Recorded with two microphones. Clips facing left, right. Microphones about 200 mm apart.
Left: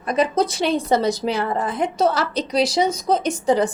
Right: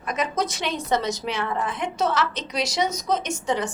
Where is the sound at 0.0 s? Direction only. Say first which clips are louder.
Left 7 dB; 35° left (ahead or behind).